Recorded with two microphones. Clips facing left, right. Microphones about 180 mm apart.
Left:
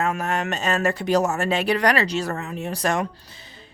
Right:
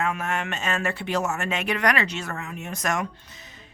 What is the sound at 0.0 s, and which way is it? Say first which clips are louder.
Speech: left 3 dB; 40° left (ahead or behind).